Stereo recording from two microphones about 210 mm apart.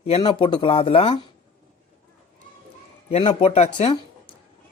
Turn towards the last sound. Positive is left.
turn(degrees=25)  # may be behind; listen again after turning